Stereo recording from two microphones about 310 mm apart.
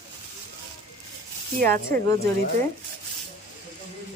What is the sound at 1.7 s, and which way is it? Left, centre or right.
Speech, centre.